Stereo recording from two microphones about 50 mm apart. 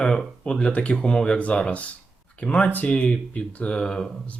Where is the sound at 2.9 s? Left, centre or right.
Left.